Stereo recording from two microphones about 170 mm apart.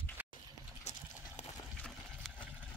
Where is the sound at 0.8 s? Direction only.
45° left (ahead or behind).